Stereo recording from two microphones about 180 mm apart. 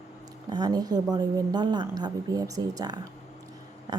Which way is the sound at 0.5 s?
20° right (ahead or behind).